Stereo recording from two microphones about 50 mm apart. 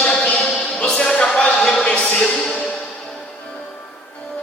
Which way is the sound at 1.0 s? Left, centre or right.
Left.